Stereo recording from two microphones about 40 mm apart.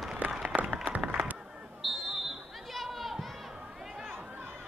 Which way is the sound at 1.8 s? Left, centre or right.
Centre.